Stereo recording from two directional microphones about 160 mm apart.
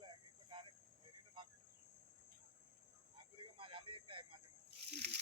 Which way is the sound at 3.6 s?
35° right (ahead or behind).